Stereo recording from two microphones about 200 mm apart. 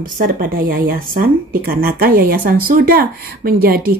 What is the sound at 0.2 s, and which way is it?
Speech, 45° right (ahead or behind).